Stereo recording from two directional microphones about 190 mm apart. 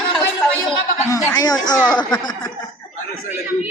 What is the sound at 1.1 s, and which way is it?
Speech, 15° left (ahead or behind).